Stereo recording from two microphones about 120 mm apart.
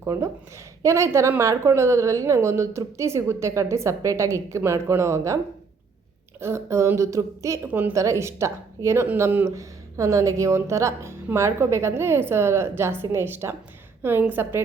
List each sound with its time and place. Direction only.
0.0 s a woman's voice: 25° right (ahead or behind)
6.4 s speech: 25° right (ahead or behind)
7.7 s a woman's voice: 15° right (ahead or behind)